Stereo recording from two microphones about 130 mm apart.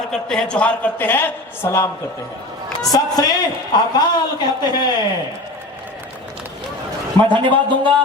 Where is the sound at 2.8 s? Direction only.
30° left (ahead or behind).